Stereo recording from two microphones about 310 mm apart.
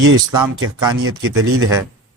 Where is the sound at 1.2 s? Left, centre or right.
Right.